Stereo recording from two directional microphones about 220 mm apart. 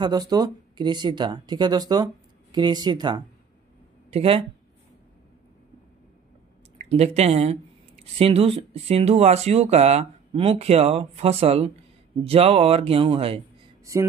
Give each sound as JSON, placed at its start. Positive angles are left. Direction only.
{"t": 0.0, "sound": "speech", "side_deg": -20}
{"t": 6.8, "sound": "speech", "side_deg": -30}